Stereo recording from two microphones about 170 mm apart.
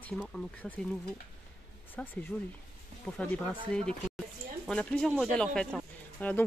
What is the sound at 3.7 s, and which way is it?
Speech, 5° left (ahead or behind).